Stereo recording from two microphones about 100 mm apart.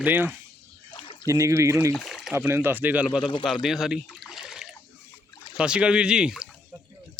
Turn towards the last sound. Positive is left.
turn(degrees=-10)  # may be behind; listen again after turning